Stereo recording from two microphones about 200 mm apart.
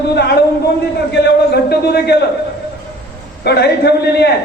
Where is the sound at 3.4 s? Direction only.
55° left (ahead or behind).